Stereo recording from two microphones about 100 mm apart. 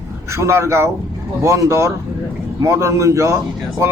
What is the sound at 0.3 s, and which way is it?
A man's voice, 30° right (ahead or behind).